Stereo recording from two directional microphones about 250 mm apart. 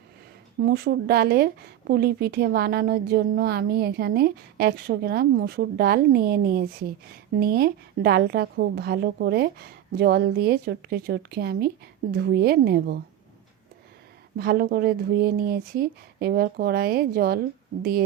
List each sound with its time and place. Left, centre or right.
0.6 s a woman's voice: right
14.3 s a woman's voice: right